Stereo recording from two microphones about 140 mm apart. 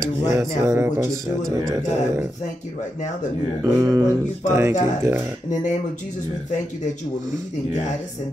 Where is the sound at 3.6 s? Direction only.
25° right (ahead or behind).